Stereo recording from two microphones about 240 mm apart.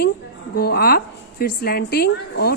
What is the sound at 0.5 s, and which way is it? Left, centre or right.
A woman's voice, left.